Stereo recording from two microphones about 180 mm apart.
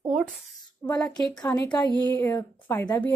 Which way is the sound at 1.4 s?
15° left (ahead or behind).